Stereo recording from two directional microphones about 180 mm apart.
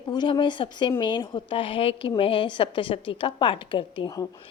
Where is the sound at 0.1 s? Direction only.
25° left (ahead or behind).